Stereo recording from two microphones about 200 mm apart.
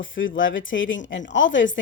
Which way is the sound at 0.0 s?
75° left (ahead or behind).